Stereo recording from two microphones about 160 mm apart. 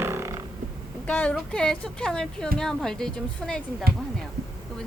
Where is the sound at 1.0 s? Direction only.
10° left (ahead or behind).